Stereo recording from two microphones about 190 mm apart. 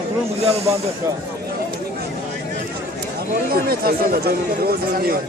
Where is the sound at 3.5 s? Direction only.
50° right (ahead or behind).